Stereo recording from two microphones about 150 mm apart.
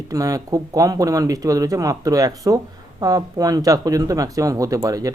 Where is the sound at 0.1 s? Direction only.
25° right (ahead or behind).